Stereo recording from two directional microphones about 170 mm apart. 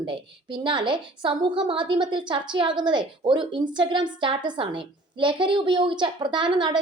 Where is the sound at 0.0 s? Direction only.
30° right (ahead or behind).